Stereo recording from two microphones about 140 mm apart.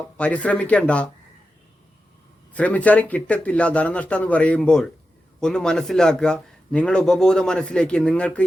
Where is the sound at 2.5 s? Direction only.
10° left (ahead or behind).